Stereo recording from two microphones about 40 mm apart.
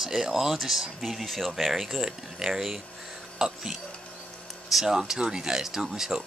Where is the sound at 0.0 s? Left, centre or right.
Centre.